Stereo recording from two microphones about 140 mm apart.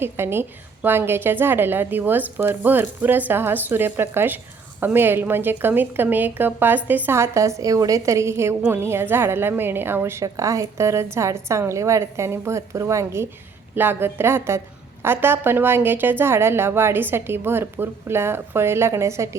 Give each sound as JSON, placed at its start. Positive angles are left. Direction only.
{"t": 0.0, "sound": "a woman's voice", "side_deg": -15}